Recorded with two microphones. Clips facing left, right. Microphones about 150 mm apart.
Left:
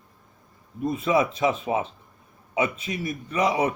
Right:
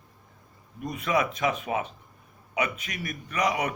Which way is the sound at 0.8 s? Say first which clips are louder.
Left 4 dB; 25° left (ahead or behind).